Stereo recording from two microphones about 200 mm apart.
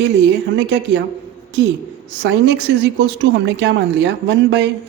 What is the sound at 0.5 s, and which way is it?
Speech, 60° right (ahead or behind).